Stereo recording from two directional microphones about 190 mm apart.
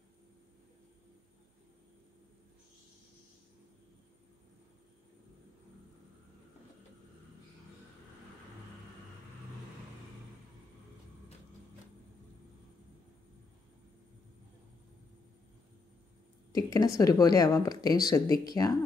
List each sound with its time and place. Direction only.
16.5 s a woman's voice: 20° left (ahead or behind)